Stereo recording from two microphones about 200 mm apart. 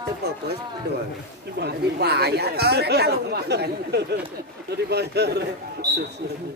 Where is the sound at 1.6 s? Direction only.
55° right (ahead or behind).